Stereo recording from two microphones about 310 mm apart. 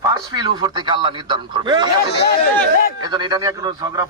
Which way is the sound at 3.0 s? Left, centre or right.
Centre.